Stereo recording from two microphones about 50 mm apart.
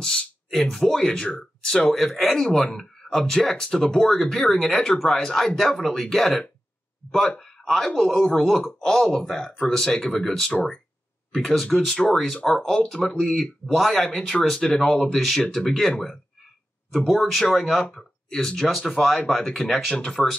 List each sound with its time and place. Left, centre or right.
0.0 s speech: centre
0.5 s speech: centre
15.1 s speech: centre
16.9 s speech: centre
17.9 s speech: centre